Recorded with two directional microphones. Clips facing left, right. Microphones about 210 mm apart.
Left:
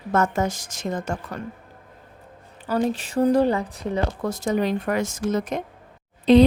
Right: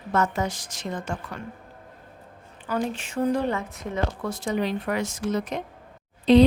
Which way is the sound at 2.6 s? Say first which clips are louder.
Left 4 dB; 35° left (ahead or behind).